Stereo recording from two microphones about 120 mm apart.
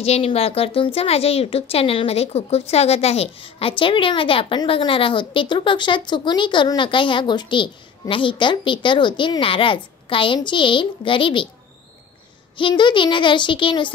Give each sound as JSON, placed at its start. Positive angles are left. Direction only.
{"t": 0.0, "sound": "speech", "side_deg": 55}
{"t": 12.5, "sound": "speech", "side_deg": 40}